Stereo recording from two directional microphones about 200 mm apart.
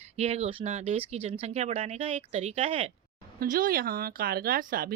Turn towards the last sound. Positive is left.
turn(degrees=-45)  # may be behind; listen again after turning